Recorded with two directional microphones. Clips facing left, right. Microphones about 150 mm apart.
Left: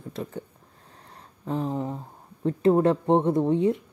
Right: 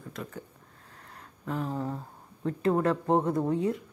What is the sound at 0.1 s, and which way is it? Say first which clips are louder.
Speech: left 6 dB; 30° left (ahead or behind).